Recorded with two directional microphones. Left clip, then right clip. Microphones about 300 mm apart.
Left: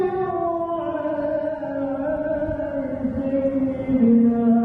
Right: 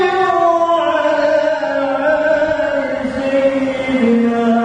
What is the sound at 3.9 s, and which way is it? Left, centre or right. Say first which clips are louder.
Music: right 3 dB; centre.